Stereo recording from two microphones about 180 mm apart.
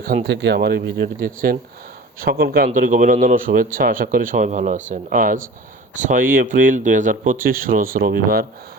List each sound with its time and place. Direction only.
0.0 s speech: 55° right (ahead or behind)
1.2 s speech: 55° right (ahead or behind)